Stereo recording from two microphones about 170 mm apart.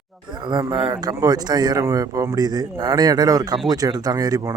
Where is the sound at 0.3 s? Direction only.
25° right (ahead or behind).